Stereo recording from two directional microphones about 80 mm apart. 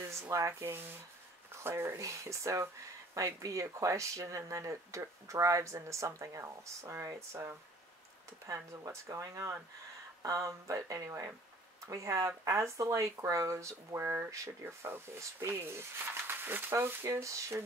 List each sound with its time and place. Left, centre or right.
0.0 s a sound: right
0.3 s speech: right
16.7 s speech: right